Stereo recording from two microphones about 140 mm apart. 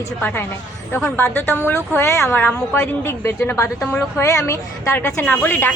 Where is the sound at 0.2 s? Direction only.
15° left (ahead or behind).